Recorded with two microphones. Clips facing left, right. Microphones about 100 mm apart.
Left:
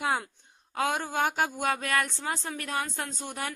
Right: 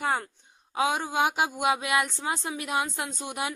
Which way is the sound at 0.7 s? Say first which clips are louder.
Right 2 dB; 5° right (ahead or behind).